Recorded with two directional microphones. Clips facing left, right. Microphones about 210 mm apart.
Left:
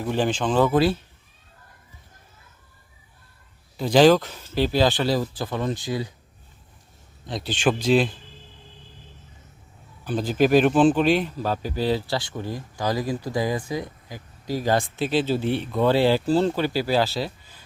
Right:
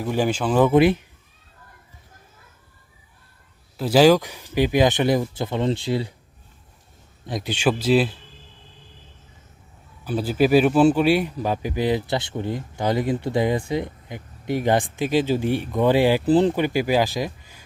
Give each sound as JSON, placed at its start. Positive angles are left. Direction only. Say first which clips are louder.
{"t": 0.0, "sound": "speech", "louder": "right 1 dB", "side_deg": -10}
{"t": 3.8, "sound": "speech", "louder": "right 1 dB", "side_deg": -5}
{"t": 7.3, "sound": "speech", "louder": "right 1 dB", "side_deg": -15}
{"t": 10.0, "sound": "speech", "louder": "right 1 dB", "side_deg": -5}